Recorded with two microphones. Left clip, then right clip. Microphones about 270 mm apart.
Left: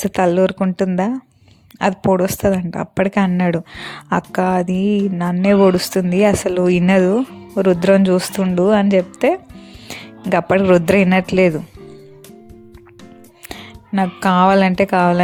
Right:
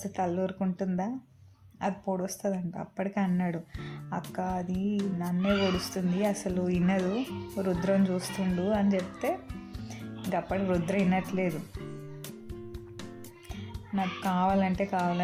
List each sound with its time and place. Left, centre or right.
0.0 s speech: left
13.9 s speech: left